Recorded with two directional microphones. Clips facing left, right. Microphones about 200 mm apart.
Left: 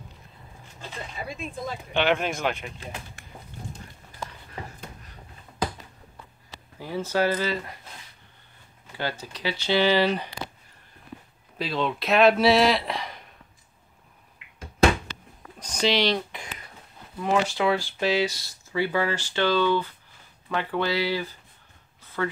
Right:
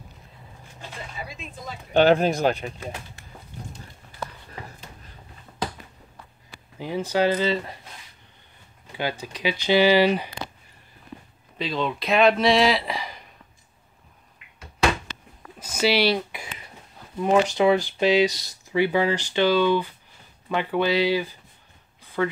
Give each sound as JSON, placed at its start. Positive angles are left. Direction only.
{"t": 2.0, "sound": "speech", "side_deg": -35}
{"t": 6.8, "sound": "speech", "side_deg": -15}
{"t": 9.2, "sound": "speech", "side_deg": -15}
{"t": 11.5, "sound": "speech", "side_deg": 0}
{"t": 15.6, "sound": "a sound", "side_deg": -5}
{"t": 17.2, "sound": "speech", "side_deg": -20}